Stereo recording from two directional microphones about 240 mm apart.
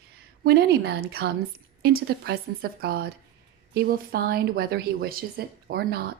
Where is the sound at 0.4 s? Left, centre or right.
Right.